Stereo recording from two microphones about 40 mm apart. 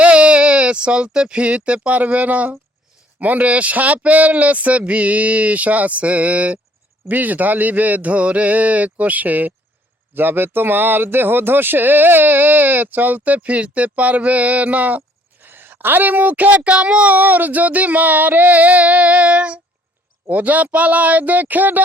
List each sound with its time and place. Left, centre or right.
0.0 s speech: right
2.0 s a man's voice: right
10.2 s speech: right
15.4 s a woman's voice: right
16.7 s speech: right
17.1 s speech: right
20.3 s speech: right